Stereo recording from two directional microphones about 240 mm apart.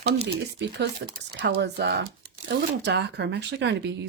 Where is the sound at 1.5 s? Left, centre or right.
Right.